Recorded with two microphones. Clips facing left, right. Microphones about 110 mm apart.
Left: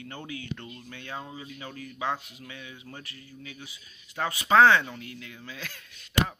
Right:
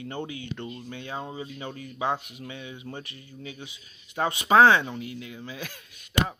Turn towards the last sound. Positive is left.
turn(degrees=-15)  # may be behind; listen again after turning